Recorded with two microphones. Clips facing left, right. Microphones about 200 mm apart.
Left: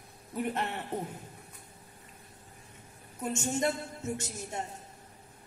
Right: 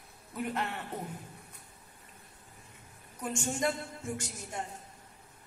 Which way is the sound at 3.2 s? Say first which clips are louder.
Left 2 dB; 25° left (ahead or behind).